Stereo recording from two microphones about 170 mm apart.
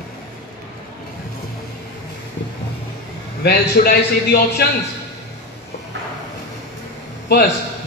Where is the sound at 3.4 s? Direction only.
65° left (ahead or behind).